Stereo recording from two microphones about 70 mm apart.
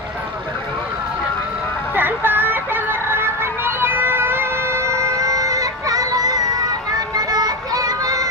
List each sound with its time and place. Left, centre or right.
2.0 s music: right
3.1 s child singing: right
6.9 s music: right